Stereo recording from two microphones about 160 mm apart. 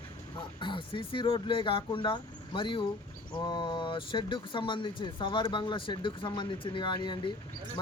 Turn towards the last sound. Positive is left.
turn(degrees=30)  # may be behind; listen again after turning